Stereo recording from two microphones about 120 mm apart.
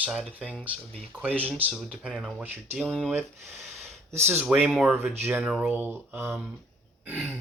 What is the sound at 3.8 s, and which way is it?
Speech, 20° right (ahead or behind).